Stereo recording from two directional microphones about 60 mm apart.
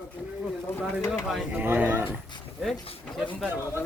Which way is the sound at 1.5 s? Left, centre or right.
Right.